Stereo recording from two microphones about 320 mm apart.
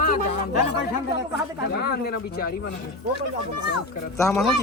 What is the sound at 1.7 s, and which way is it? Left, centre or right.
Speech, left.